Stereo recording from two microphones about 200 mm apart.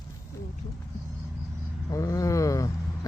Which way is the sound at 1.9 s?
15° left (ahead or behind).